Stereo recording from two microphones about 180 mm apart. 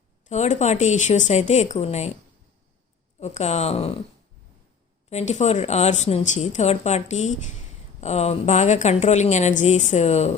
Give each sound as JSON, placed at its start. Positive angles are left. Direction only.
{"t": 0.3, "sound": "speech", "side_deg": 40}
{"t": 3.2, "sound": "speech", "side_deg": 40}
{"t": 5.0, "sound": "speech", "side_deg": 40}